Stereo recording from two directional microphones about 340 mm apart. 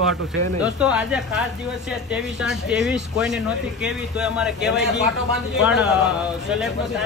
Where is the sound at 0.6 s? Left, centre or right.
Centre.